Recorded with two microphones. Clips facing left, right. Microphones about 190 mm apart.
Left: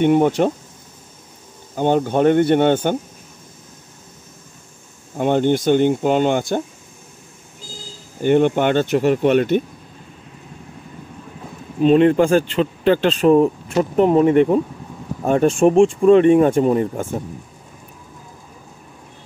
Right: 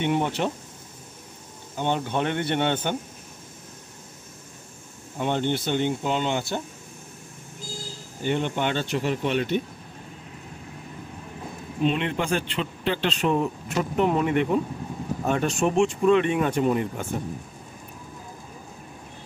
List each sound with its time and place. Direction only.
0.0 s speech: 45° left (ahead or behind)
1.8 s speech: 45° left (ahead or behind)
5.1 s speech: 50° left (ahead or behind)
8.2 s speech: 55° left (ahead or behind)
11.8 s speech: 40° left (ahead or behind)